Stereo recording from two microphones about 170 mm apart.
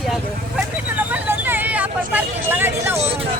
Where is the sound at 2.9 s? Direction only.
40° right (ahead or behind).